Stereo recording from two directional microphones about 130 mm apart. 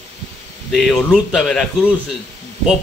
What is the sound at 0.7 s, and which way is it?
Speech, 5° left (ahead or behind).